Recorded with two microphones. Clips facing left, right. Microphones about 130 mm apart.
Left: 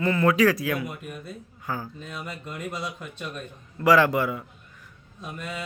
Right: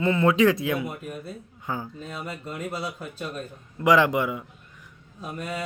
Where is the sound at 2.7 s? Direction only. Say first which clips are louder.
Right 2 dB; 35° right (ahead or behind).